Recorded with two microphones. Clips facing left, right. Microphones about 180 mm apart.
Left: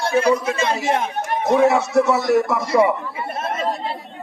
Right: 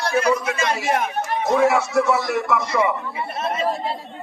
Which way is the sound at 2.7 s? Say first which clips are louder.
Left 6 dB; 30° left (ahead or behind).